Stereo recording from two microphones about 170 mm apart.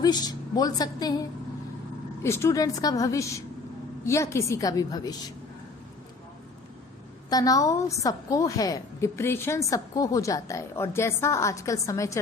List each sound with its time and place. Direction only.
0.0 s a woman's voice: 25° left (ahead or behind)
2.2 s a woman's voice: 15° left (ahead or behind)
7.3 s a woman's voice: 20° left (ahead or behind)